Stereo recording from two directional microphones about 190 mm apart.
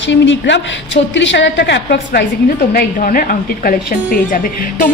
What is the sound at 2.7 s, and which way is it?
A woman's voice, 50° left (ahead or behind).